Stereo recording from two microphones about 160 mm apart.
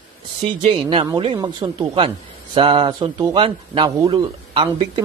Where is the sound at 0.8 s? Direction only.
30° right (ahead or behind).